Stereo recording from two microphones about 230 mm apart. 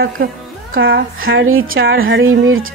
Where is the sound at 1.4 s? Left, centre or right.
Right.